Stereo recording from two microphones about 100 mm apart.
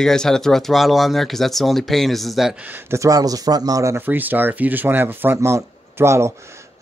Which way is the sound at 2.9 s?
35° right (ahead or behind).